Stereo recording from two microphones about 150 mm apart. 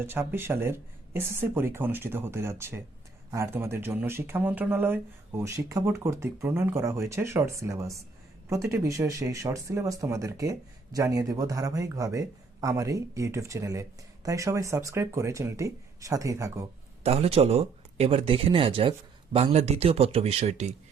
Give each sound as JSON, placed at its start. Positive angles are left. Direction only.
{"t": 0.0, "sound": "speech", "side_deg": -15}
{"t": 17.0, "sound": "speech", "side_deg": -40}